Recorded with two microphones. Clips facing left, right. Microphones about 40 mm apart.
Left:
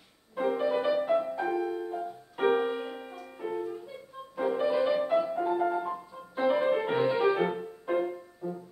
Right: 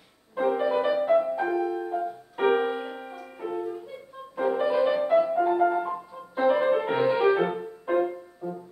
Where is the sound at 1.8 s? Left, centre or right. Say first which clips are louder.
Right 5 dB; centre.